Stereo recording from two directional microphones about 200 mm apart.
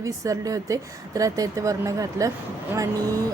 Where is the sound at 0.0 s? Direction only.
15° right (ahead or behind).